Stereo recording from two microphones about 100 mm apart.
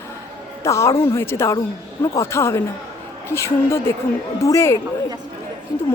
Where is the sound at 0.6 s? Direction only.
30° left (ahead or behind).